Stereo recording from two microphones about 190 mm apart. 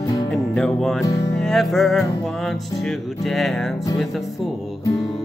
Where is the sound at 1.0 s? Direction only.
20° left (ahead or behind).